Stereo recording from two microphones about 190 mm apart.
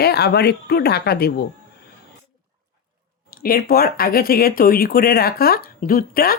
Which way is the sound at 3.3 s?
50° left (ahead or behind).